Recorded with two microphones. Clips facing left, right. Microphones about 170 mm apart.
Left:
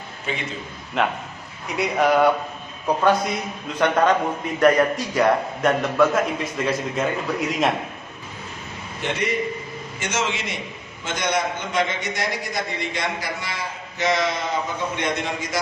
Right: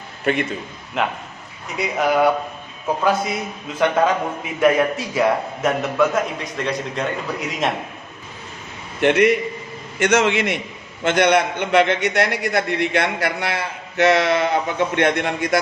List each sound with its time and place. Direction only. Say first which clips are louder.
0.3 s a man's voice: right 9 dB; 65° right (ahead or behind)
1.0 s a man's voice: even; centre (ahead or behind)
4.6 s a man's voice: even; centre (ahead or behind)
9.0 s a man's voice: right 9 dB; 65° right (ahead or behind)